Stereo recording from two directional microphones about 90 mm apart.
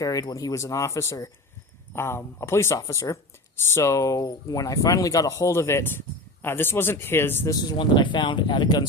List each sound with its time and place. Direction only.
0.0 s a man's voice: 40° left (ahead or behind)
7.8 s speech: 65° left (ahead or behind)